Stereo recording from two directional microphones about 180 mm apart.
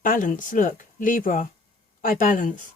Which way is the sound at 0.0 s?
50° left (ahead or behind).